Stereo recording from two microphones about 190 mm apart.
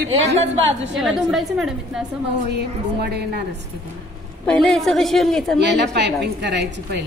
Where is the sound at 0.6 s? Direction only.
70° right (ahead or behind).